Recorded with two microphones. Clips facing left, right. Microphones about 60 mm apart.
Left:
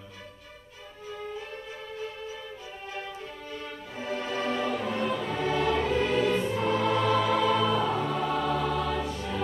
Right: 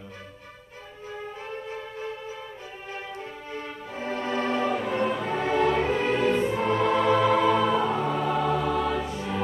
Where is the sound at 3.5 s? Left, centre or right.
Right.